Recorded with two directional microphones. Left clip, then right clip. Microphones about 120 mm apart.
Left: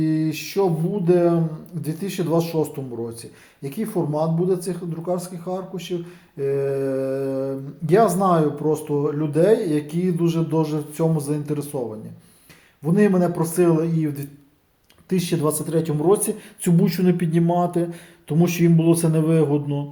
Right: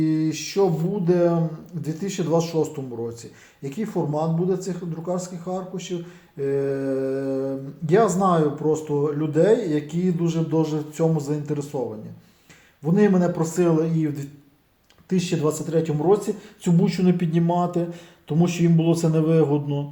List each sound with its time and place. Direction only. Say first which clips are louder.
0.0 s a man's voice: even; 20° left (ahead or behind)
15.1 s speech: left 1 dB; 30° left (ahead or behind)